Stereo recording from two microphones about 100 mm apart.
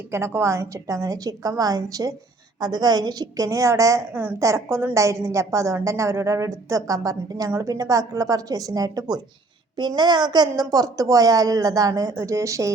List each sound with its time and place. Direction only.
0.1 s a woman's voice: 25° right (ahead or behind)